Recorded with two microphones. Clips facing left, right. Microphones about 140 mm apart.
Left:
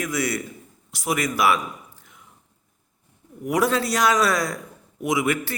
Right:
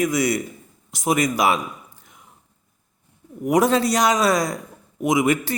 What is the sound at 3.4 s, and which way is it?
A man's voice, 20° right (ahead or behind).